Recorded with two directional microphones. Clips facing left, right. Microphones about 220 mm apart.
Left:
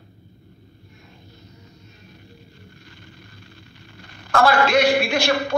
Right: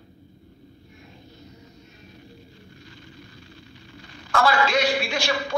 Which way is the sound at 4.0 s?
60° left (ahead or behind).